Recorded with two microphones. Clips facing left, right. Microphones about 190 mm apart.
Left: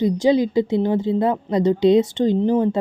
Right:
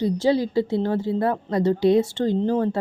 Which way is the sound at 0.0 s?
15° left (ahead or behind).